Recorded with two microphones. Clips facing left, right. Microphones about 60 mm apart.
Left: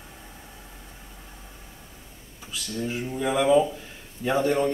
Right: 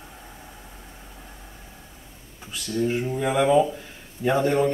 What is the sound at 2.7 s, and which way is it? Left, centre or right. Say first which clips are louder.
Speech: right 6 dB; right.